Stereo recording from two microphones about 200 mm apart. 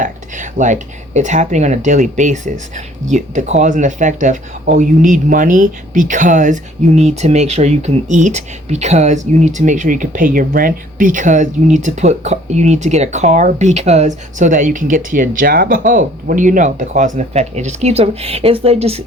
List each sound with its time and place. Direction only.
0.0 s speech: 40° right (ahead or behind)